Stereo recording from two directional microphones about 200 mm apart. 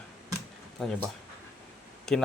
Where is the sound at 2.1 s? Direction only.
Centre (ahead or behind).